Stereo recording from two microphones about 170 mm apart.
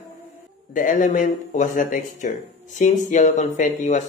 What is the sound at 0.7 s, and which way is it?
Speech, 50° left (ahead or behind).